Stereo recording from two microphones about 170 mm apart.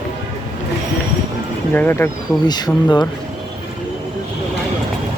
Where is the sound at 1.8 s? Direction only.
10° left (ahead or behind).